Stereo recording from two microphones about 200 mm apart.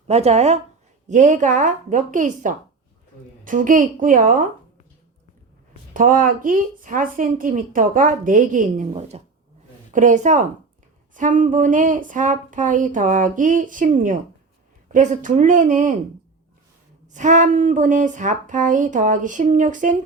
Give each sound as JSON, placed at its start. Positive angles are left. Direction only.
{"t": 0.1, "sound": "a woman's voice", "side_deg": -30}
{"t": 5.9, "sound": "a woman's voice", "side_deg": -40}
{"t": 17.1, "sound": "a woman's voice", "side_deg": -40}